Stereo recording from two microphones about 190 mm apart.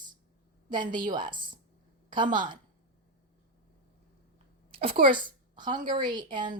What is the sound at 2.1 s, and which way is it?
Speech, 25° right (ahead or behind).